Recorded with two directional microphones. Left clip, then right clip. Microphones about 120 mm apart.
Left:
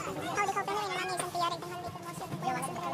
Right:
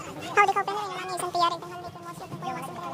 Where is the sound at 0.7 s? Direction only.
10° right (ahead or behind).